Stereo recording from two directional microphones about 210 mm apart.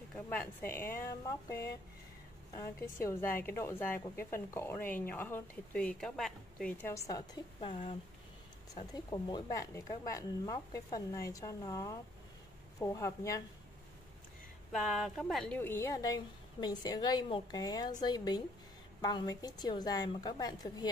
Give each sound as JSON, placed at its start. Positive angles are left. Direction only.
{"t": 0.1, "sound": "a woman's voice", "side_deg": 10}
{"t": 8.9, "sound": "a woman's voice", "side_deg": 20}
{"t": 14.7, "sound": "a woman's voice", "side_deg": 0}